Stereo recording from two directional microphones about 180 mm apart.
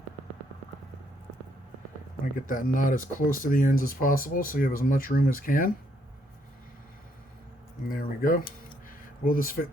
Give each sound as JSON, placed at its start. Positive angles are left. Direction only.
{"t": 2.5, "sound": "speech", "side_deg": 50}
{"t": 7.9, "sound": "a sound", "side_deg": 50}
{"t": 9.2, "sound": "speech", "side_deg": 50}